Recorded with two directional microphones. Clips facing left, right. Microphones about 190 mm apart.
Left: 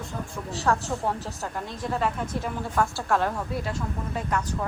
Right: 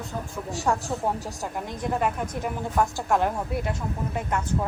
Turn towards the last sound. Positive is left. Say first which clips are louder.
# right 1 dB
turn(degrees=-25)  # may be behind; listen again after turning